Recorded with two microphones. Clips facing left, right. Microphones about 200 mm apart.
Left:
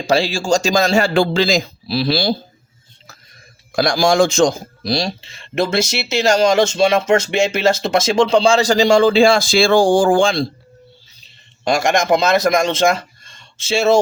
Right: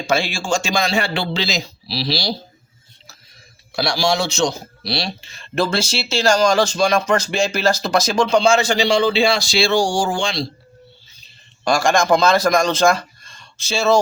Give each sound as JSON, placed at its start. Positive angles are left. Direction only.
{"t": 0.1, "sound": "a man's voice", "side_deg": 35}
{"t": 3.7, "sound": "a man's voice", "side_deg": 50}
{"t": 5.2, "sound": "speech", "side_deg": 25}
{"t": 11.6, "sound": "speech", "side_deg": 20}